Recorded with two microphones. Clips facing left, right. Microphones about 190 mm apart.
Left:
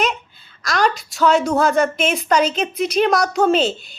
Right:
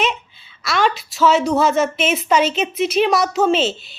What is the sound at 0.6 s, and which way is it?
A woman's voice, centre (ahead or behind).